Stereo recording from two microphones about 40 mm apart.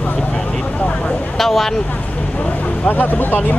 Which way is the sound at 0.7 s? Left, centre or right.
Left.